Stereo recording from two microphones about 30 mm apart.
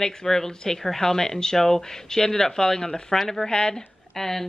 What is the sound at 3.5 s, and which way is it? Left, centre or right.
Speech, left.